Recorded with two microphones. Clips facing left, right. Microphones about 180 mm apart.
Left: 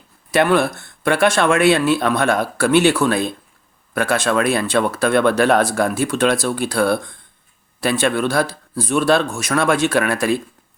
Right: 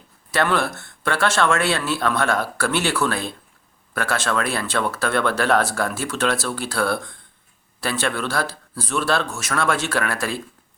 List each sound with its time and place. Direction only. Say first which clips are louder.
0.3 s speech: left 6 dB; 15° left (ahead or behind)